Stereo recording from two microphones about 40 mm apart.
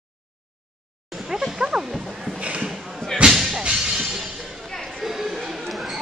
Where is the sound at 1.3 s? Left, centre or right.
Centre.